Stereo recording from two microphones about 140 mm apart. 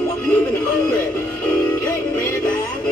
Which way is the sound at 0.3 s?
10° left (ahead or behind).